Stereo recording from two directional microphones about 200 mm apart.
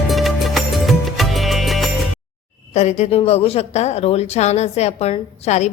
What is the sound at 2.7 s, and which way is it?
A woman's voice, 35° left (ahead or behind).